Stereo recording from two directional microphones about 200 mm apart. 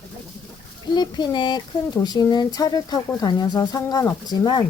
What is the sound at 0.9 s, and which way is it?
Speech, 20° left (ahead or behind).